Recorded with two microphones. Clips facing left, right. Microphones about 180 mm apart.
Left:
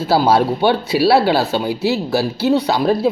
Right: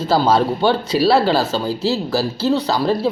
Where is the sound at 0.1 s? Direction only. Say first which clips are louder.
Left 1 dB; 10° left (ahead or behind).